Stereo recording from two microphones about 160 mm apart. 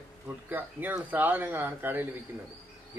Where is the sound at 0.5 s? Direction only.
10° right (ahead or behind).